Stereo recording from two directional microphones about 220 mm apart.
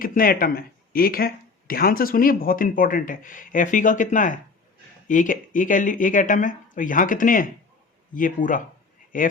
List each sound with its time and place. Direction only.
0.0 s speech: 40° left (ahead or behind)